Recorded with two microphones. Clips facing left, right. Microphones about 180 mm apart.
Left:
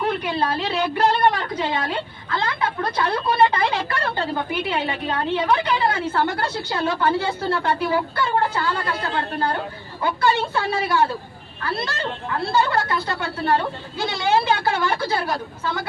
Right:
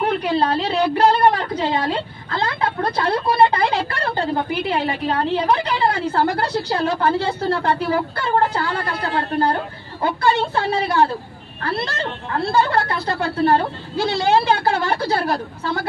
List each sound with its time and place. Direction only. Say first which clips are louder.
0.2 s a woman's voice: right 4 dB; 35° right (ahead or behind)
10.0 s speech: right 2 dB; 35° right (ahead or behind)
12.4 s speech: right 2 dB; 35° right (ahead or behind)